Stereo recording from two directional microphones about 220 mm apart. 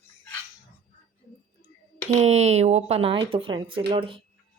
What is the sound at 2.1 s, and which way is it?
Speech, 30° right (ahead or behind).